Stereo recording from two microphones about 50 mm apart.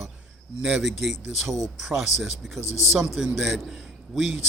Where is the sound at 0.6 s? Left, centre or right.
Centre.